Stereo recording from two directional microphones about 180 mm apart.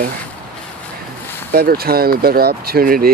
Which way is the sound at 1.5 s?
60° right (ahead or behind).